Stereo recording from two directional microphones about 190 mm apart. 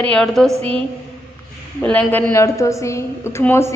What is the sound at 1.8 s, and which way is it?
Speech, 5° left (ahead or behind).